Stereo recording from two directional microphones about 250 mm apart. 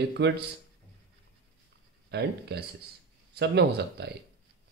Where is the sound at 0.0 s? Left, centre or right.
Right.